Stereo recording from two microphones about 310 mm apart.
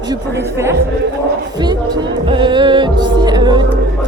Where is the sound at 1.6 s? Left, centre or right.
Centre.